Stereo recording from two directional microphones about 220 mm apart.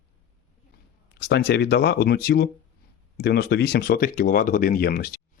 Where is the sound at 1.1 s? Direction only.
50° left (ahead or behind).